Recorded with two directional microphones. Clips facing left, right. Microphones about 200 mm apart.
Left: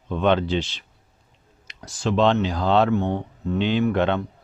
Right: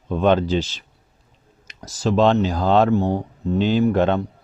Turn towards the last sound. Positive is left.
turn(degrees=-40)  # may be behind; listen again after turning